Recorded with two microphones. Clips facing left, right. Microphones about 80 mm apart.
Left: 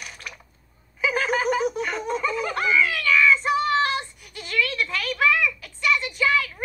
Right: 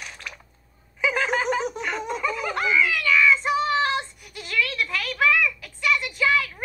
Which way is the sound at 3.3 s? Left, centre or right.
Centre.